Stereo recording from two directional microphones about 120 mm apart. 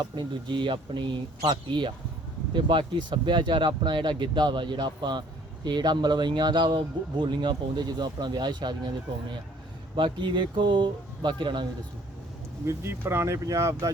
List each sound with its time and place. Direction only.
0.0 s speech: 40° right (ahead or behind)
9.9 s speech: 45° right (ahead or behind)
12.6 s speech: 20° right (ahead or behind)